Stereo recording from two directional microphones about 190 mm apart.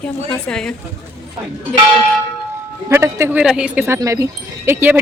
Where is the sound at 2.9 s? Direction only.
15° right (ahead or behind).